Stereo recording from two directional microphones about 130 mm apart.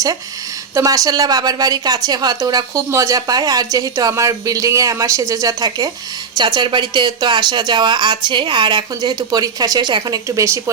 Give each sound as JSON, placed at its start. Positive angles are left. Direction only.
{"t": 0.7, "sound": "a woman's voice", "side_deg": -25}